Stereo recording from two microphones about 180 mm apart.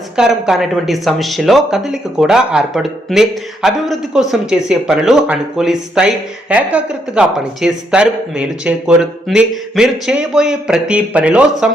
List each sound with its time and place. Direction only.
0.2 s speech: 5° right (ahead or behind)